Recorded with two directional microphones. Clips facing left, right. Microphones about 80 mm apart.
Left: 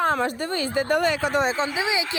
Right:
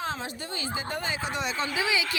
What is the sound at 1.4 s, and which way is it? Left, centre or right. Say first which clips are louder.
Speech: left 5 dB; left.